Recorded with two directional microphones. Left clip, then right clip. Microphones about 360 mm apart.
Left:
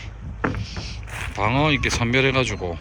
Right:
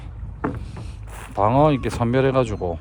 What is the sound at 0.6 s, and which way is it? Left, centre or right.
Speech, centre.